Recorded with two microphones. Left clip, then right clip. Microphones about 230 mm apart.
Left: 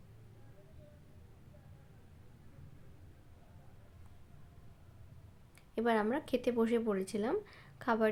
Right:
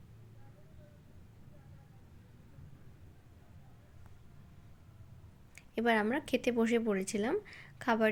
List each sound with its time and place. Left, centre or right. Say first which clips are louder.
5.5 s a woman's voice: right 2 dB; centre